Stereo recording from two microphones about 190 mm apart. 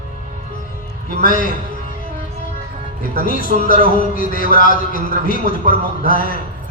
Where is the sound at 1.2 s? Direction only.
45° left (ahead or behind).